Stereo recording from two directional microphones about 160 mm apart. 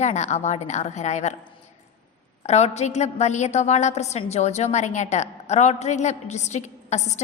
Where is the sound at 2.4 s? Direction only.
45° left (ahead or behind).